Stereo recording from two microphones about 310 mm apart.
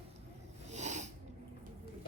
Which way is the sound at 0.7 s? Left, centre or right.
Right.